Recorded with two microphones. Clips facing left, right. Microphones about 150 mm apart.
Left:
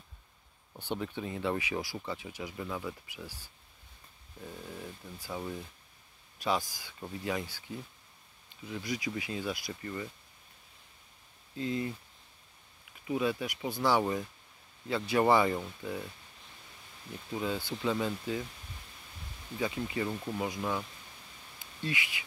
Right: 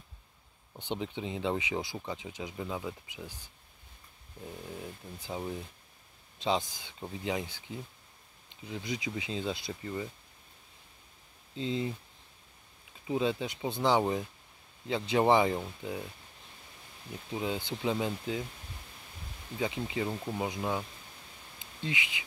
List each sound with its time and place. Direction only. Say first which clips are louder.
0.7 s speech: even; 20° right (ahead or behind)
9.8 s speech: right 2 dB; 10° right (ahead or behind)
11.5 s speech: right 1 dB; 25° right (ahead or behind)
13.0 s speech: right 1 dB; 25° right (ahead or behind)
17.3 s speech: even; 20° right (ahead or behind)
19.6 s speech: even; 20° right (ahead or behind)
21.5 s a sound: even; 20° right (ahead or behind)